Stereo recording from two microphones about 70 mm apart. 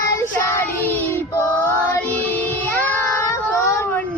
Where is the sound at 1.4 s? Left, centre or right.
Left.